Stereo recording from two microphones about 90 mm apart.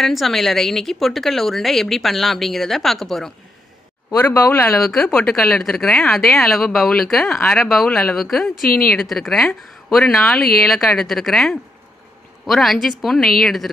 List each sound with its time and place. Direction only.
0.0 s speech: centre (ahead or behind)
4.3 s speech: 25° left (ahead or behind)
4.9 s speech: 5° left (ahead or behind)